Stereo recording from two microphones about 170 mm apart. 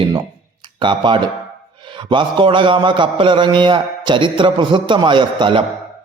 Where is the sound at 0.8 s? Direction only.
30° right (ahead or behind).